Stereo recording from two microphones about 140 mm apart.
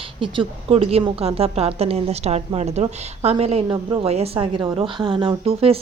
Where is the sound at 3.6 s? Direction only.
30° right (ahead or behind).